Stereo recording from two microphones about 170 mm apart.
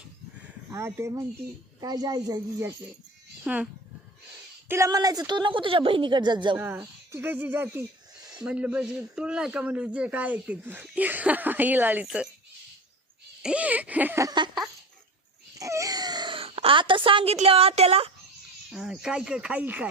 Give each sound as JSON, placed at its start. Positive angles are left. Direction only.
{"t": 0.7, "sound": "a man's voice", "side_deg": -15}
{"t": 3.4, "sound": "speech", "side_deg": -5}
{"t": 4.7, "sound": "a woman's voice", "side_deg": -20}
{"t": 6.6, "sound": "speech", "side_deg": -15}
{"t": 8.4, "sound": "a man's voice", "side_deg": -5}
{"t": 13.4, "sound": "a man's voice", "side_deg": -5}
{"t": 15.5, "sound": "a sound", "side_deg": -20}
{"t": 17.3, "sound": "a woman's voice", "side_deg": -35}
{"t": 18.7, "sound": "speech", "side_deg": 0}